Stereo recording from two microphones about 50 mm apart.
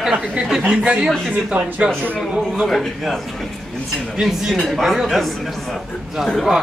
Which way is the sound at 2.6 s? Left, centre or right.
Centre.